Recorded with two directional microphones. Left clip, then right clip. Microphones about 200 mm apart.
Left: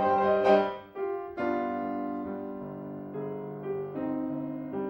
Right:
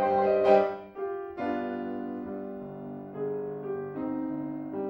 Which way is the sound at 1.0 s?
30° left (ahead or behind).